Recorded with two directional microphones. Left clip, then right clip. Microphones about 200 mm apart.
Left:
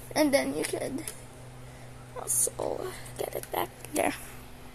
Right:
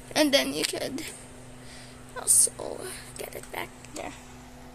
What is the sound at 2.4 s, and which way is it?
Speech, 15° left (ahead or behind).